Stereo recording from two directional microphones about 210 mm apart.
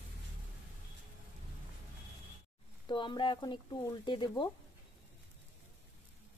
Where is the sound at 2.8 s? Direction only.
25° left (ahead or behind).